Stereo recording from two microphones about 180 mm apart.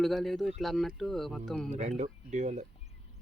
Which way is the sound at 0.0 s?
Centre (ahead or behind).